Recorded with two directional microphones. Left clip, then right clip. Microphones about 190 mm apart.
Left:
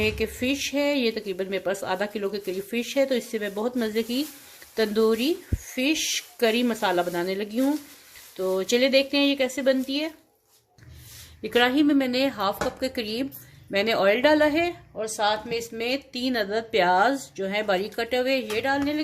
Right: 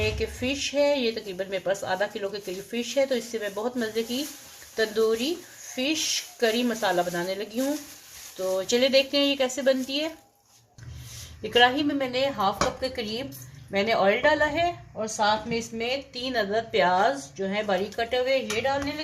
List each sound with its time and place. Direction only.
0.0 s speech: 35° left (ahead or behind)
11.4 s a woman's voice: 35° left (ahead or behind); by 19.0 s 65° left (ahead or behind)